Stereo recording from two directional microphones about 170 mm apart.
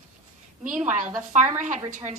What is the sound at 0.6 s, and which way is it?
A woman's voice, 45° right (ahead or behind).